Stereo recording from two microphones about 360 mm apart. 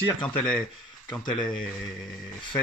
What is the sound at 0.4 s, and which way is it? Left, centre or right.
Speech, centre.